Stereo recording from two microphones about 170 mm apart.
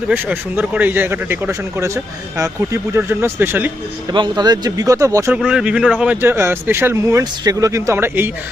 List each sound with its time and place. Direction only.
0.1 s speech: 10° right (ahead or behind)
4.1 s speech: 25° right (ahead or behind)
5.4 s speech: 5° right (ahead or behind)